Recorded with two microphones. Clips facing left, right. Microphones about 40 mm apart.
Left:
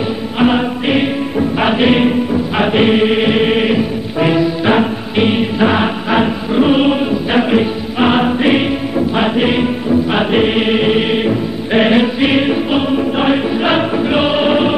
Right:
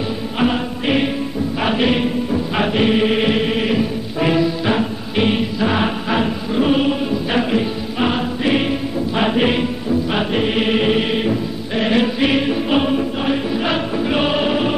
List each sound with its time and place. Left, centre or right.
0.4 s music: centre
5.6 s chant: centre
9.1 s music: centre
9.6 s music: left
11.9 s choir: centre
12.7 s choir: centre
13.2 s choir: left